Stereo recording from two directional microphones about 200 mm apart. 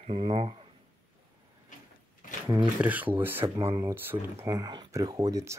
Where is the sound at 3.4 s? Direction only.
30° right (ahead or behind).